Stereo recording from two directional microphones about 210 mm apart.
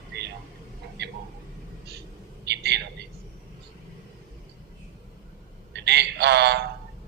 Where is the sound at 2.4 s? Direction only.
55° right (ahead or behind).